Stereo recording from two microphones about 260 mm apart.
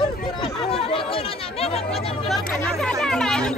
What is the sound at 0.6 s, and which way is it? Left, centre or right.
Chatter, left.